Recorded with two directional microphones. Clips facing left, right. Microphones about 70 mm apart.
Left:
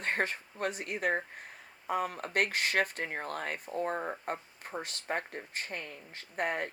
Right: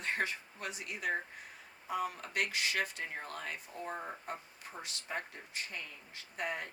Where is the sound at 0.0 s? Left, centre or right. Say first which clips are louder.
Left 4 dB; left.